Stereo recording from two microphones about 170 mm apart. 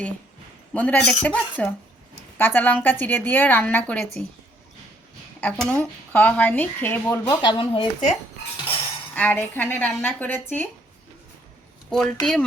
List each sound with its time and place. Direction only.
0.7 s speech: 10° left (ahead or behind)
5.4 s speech: 5° left (ahead or behind)
7.4 s speech: 30° left (ahead or behind)
9.1 s speech: 10° left (ahead or behind)
11.9 s speech: 5° left (ahead or behind)